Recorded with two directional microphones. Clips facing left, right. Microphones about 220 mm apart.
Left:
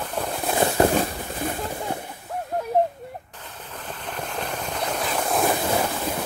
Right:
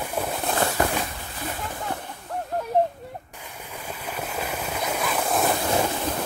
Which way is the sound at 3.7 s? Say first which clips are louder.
Even; 10° right (ahead or behind).